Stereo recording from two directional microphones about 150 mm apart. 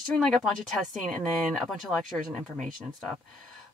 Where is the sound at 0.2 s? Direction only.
Centre (ahead or behind).